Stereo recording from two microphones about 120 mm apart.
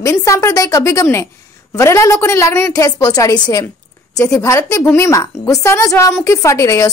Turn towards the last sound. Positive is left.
turn(degrees=30)  # may be behind; listen again after turning